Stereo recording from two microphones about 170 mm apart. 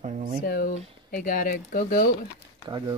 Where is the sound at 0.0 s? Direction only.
45° right (ahead or behind).